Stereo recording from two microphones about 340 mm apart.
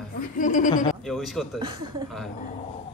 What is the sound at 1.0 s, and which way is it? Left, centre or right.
Speech, centre.